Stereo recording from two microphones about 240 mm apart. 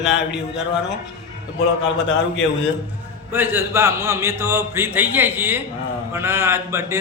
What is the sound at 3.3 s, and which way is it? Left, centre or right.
Speech, centre.